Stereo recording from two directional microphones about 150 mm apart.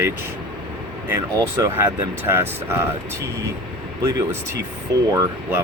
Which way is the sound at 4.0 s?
20° right (ahead or behind).